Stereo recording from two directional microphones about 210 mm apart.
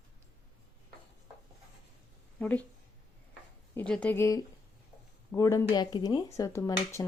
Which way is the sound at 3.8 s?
5° left (ahead or behind).